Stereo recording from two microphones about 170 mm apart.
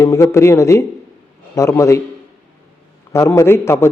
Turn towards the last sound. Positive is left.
turn(degrees=15)  # may be behind; listen again after turning